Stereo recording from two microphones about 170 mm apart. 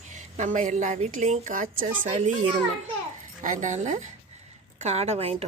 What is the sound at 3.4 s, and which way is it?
A woman's voice, 50° right (ahead or behind).